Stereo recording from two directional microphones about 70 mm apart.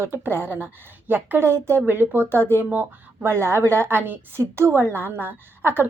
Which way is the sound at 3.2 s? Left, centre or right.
Right.